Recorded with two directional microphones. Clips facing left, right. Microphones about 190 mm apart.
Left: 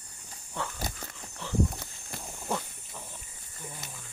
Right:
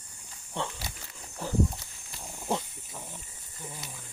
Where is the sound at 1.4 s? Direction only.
45° right (ahead or behind).